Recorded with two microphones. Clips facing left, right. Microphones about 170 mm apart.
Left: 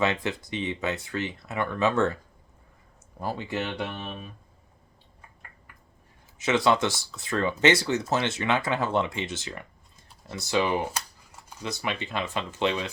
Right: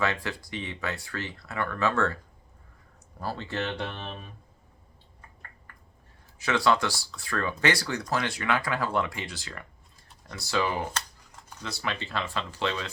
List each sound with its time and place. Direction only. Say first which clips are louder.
0.0 s speech: left 3 dB; 20° left (ahead or behind)
3.2 s speech: left 2 dB; 15° left (ahead or behind)
5.7 s a sound: even; 10° left (ahead or behind)
6.4 s speech: left 2 dB; 20° left (ahead or behind)